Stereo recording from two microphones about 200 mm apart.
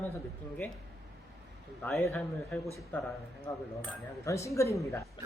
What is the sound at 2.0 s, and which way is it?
Speech, 10° left (ahead or behind).